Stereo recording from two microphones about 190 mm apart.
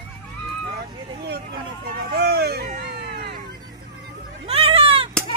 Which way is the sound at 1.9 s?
55° right (ahead or behind).